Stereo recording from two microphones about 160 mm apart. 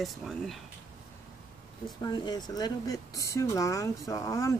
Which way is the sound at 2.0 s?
25° left (ahead or behind).